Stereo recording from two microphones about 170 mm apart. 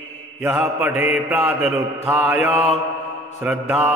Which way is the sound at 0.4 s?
10° right (ahead or behind).